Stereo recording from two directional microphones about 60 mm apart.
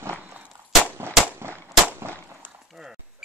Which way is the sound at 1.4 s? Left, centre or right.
Right.